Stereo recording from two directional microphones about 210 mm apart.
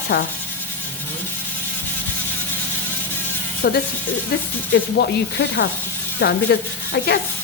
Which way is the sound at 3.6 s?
45° left (ahead or behind).